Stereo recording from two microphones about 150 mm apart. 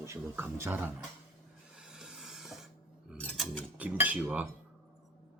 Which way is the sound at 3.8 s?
10° right (ahead or behind).